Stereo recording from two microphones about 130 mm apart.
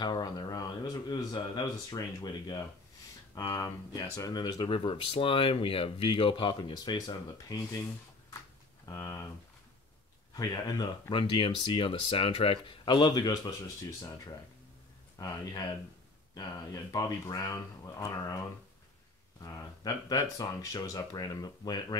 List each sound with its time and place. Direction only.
0.0 s speech: 30° left (ahead or behind)
10.3 s speech: 30° left (ahead or behind)
19.4 s speech: 25° left (ahead or behind)